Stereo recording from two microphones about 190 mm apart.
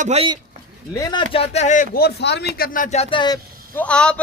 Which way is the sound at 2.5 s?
50° left (ahead or behind).